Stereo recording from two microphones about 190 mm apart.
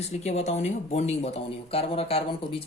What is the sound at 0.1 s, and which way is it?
Speech, 35° left (ahead or behind).